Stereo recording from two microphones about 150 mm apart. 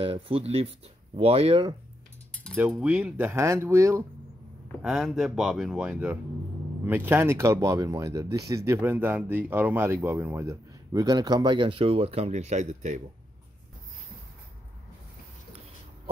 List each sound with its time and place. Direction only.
0.0 s speech: 40° right (ahead or behind)
2.5 s speech: 15° right (ahead or behind)
4.8 s speech: 5° right (ahead or behind); by 13.0 s 50° right (ahead or behind)